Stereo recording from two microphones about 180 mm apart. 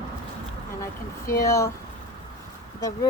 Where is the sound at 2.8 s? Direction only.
20° left (ahead or behind).